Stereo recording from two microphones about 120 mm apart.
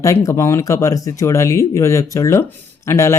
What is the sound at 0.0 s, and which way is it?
Speech, 25° left (ahead or behind).